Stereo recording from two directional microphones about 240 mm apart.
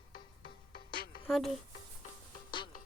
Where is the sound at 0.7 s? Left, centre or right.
Left.